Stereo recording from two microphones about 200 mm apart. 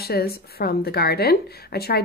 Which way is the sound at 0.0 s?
50° left (ahead or behind).